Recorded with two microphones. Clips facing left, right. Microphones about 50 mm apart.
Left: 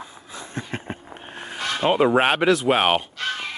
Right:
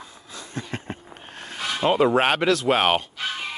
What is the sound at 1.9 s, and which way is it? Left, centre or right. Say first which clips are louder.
Speech: left 1 dB; centre.